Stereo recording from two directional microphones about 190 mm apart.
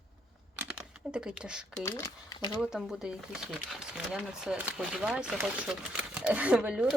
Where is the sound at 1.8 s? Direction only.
20° left (ahead or behind).